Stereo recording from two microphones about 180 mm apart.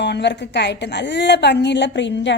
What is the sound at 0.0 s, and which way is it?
A woman's voice, 70° left (ahead or behind).